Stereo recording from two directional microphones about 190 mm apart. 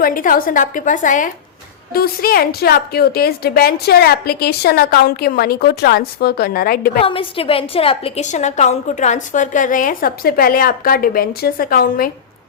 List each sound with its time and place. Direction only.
0.0 s a woman's voice: 45° left (ahead or behind)
1.9 s a woman's voice: 55° left (ahead or behind)
7.0 s a woman's voice: 30° left (ahead or behind); by 12.1 s 50° left (ahead or behind)